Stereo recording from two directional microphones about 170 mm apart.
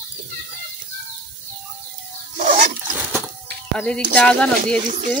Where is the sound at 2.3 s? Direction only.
50° right (ahead or behind).